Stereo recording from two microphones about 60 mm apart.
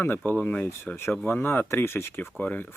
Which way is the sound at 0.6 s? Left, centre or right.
Left.